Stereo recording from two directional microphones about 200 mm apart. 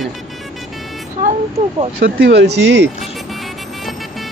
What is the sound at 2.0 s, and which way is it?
Speech, 55° right (ahead or behind).